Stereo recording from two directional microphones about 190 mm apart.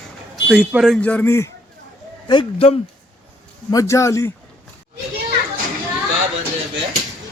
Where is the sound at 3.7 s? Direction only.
15° left (ahead or behind).